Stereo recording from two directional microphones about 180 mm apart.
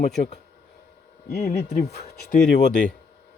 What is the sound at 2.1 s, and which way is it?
Speech, 60° left (ahead or behind).